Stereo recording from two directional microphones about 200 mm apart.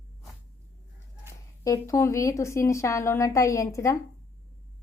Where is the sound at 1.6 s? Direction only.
15° left (ahead or behind).